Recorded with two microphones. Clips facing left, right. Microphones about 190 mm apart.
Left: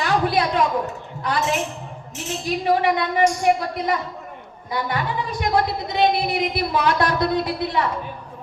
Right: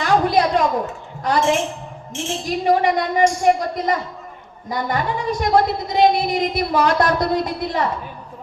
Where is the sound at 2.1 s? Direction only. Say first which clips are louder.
Right 4 dB; 25° right (ahead or behind).